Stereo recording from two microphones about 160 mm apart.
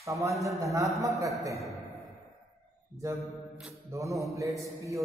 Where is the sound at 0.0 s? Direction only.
20° right (ahead or behind).